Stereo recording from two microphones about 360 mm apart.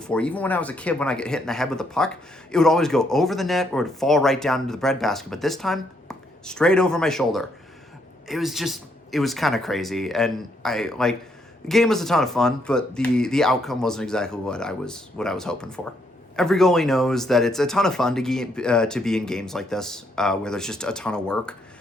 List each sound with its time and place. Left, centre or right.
0.0 s speech: centre